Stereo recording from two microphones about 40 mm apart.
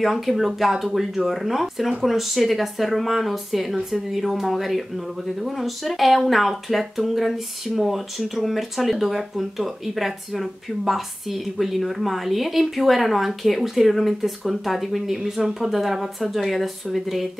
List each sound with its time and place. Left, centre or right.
0.0 s speech: centre